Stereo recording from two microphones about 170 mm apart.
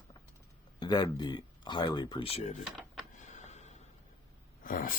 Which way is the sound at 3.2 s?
45° left (ahead or behind).